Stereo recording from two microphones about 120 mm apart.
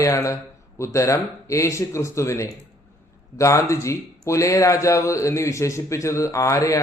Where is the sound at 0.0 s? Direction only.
25° left (ahead or behind).